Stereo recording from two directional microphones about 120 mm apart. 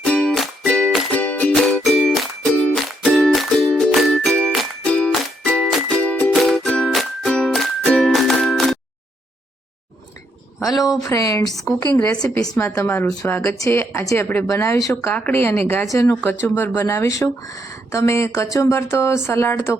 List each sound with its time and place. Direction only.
0.0 s music: 10° left (ahead or behind)
10.7 s speech: 35° left (ahead or behind)
15.1 s speech: 15° left (ahead or behind)